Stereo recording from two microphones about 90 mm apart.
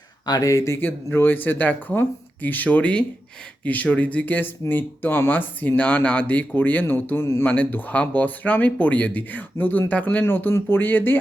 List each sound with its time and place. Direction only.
0.3 s speech: 40° left (ahead or behind); by 11.2 s 20° left (ahead or behind)